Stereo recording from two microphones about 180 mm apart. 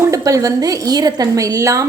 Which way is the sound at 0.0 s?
20° right (ahead or behind).